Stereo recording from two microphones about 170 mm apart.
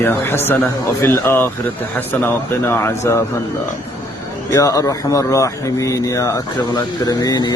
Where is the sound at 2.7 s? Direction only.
15° left (ahead or behind).